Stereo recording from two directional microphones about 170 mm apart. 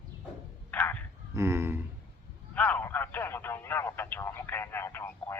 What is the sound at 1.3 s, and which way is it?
Speech, 15° right (ahead or behind).